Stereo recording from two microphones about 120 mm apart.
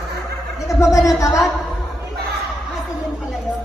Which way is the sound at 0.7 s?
25° left (ahead or behind).